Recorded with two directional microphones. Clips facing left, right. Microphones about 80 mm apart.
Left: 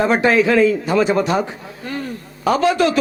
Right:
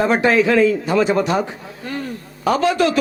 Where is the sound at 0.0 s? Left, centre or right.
Centre.